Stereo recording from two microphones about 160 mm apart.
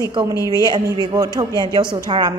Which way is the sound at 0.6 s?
25° right (ahead or behind).